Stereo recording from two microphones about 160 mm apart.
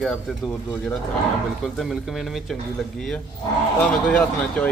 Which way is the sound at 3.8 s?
10° left (ahead or behind).